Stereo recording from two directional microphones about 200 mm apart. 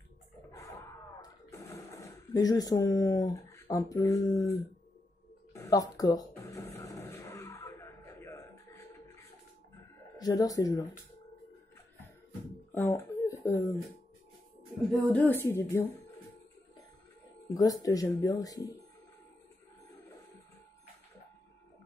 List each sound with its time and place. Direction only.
0.5 s a sound: 15° left (ahead or behind)
10.1 s speech: 20° left (ahead or behind)
12.7 s speech: 10° left (ahead or behind)
15.0 s speech: 10° left (ahead or behind)
17.6 s speech: 20° left (ahead or behind)